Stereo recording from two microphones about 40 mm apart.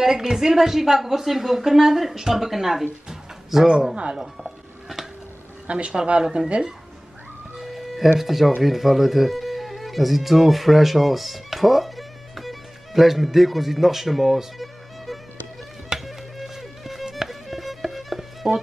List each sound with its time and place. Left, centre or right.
0.0 s a woman's voice: centre
5.7 s speech: right
7.5 s music: centre
8.2 s speech: centre
16.1 s music: centre